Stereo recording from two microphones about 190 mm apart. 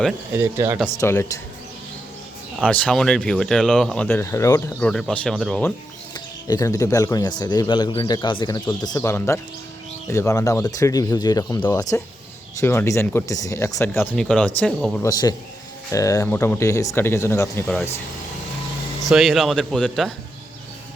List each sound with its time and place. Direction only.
0.3 s speech: 15° right (ahead or behind)
0.9 s speech: 15° left (ahead or behind)
2.6 s speech: 5° left (ahead or behind)
4.9 s speech: 5° left (ahead or behind)
6.1 s speech: 20° left (ahead or behind); by 15.0 s centre (ahead or behind)
15.0 s speech: 20° left (ahead or behind)
19.0 s speech: centre (ahead or behind)